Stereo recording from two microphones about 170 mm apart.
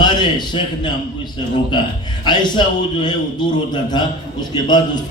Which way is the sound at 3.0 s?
25° left (ahead or behind).